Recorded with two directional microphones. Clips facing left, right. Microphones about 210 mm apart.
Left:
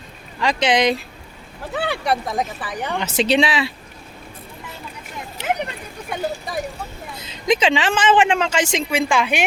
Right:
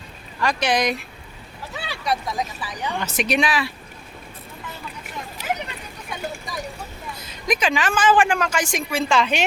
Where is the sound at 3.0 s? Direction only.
25° left (ahead or behind).